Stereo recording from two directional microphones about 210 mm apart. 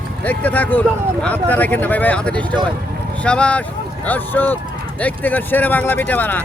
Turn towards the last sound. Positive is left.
turn(degrees=10)  # may be behind; listen again after turning